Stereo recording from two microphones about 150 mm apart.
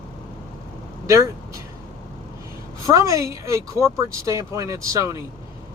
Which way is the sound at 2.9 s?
20° right (ahead or behind).